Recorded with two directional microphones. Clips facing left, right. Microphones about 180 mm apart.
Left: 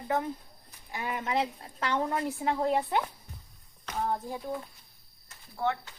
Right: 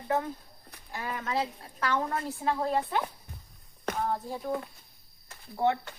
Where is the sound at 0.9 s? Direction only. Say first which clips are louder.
Left 1 dB; 15° left (ahead or behind).